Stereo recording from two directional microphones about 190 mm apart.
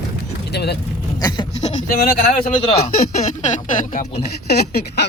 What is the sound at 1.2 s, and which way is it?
Goat, 20° left (ahead or behind).